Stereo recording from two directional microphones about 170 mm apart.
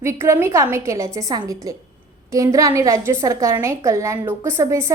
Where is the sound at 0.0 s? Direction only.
15° right (ahead or behind).